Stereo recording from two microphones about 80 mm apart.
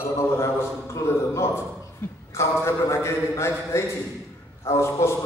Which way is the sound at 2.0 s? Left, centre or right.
Left.